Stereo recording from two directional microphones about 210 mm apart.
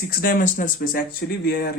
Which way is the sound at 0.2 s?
40° left (ahead or behind).